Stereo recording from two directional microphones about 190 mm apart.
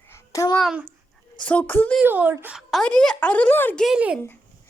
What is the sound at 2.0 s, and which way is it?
Speech, 10° right (ahead or behind).